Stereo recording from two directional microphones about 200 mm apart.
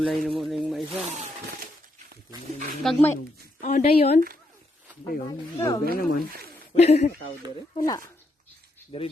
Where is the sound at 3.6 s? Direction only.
40° left (ahead or behind).